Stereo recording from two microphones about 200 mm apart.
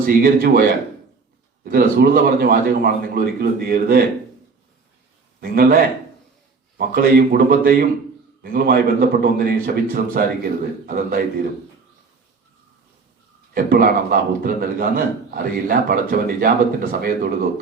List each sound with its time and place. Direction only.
0.0 s a man's voice: 45° right (ahead or behind)
1.6 s a man's voice: 45° right (ahead or behind)
5.4 s a man's voice: 50° right (ahead or behind)
13.5 s a man's voice: 45° right (ahead or behind)